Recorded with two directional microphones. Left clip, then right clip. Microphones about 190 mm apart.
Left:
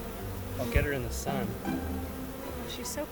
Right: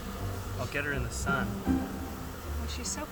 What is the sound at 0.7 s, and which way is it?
Speech, 20° left (ahead or behind).